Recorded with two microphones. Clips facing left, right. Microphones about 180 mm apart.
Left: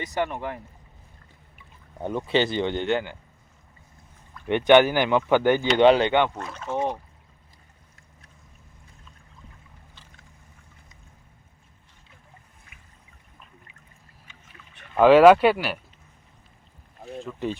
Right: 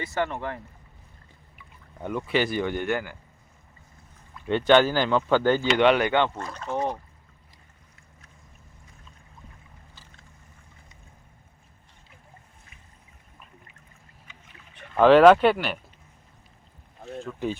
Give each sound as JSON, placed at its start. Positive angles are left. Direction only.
{"t": 0.0, "sound": "speech", "side_deg": 15}
{"t": 2.0, "sound": "speech", "side_deg": 25}
{"t": 4.4, "sound": "speech", "side_deg": 15}
{"t": 5.8, "sound": "speech", "side_deg": 30}
{"t": 6.3, "sound": "speech", "side_deg": 0}
{"t": 14.9, "sound": "speech", "side_deg": 5}
{"t": 17.2, "sound": "speech", "side_deg": 0}